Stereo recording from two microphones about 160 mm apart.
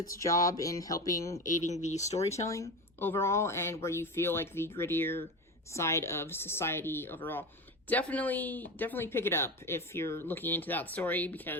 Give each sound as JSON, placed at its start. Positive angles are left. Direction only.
{"t": 0.0, "sound": "speech", "side_deg": 20}
{"t": 1.5, "sound": "speech", "side_deg": 45}
{"t": 2.3, "sound": "speech", "side_deg": 20}